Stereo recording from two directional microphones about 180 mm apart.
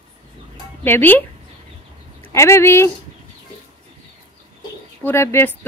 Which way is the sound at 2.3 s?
15° left (ahead or behind).